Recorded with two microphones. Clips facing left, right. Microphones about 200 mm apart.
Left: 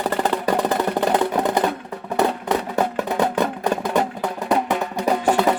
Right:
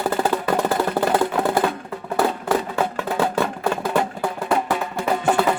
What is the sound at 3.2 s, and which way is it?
Music, 20° left (ahead or behind).